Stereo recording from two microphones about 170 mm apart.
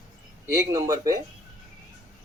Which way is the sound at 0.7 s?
20° right (ahead or behind).